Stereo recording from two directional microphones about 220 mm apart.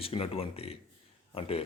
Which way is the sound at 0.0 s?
25° left (ahead or behind).